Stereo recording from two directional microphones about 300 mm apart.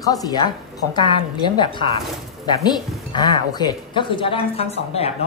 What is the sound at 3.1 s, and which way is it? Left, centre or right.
A woman's voice, centre.